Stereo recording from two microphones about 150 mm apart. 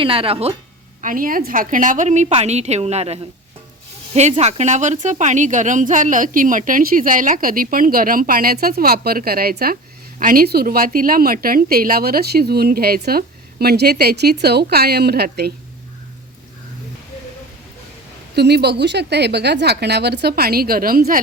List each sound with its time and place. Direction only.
0.0 s speech: 40° right (ahead or behind)
1.0 s a woman's voice: 65° right (ahead or behind); by 9.7 s 90° right
10.2 s a woman's voice: 70° right (ahead or behind); by 15.5 s 90° right
18.3 s a woman's voice: 90° right; by 21.2 s 75° right (ahead or behind)